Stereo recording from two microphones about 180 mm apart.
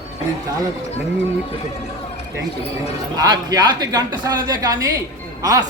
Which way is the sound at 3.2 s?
20° right (ahead or behind).